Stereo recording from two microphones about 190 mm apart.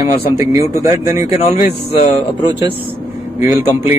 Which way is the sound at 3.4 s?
10° right (ahead or behind).